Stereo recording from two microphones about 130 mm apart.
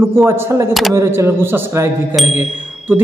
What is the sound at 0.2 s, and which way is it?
A man's voice, 20° right (ahead or behind).